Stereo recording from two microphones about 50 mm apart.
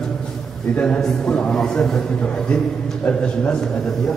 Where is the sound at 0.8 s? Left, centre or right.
Centre.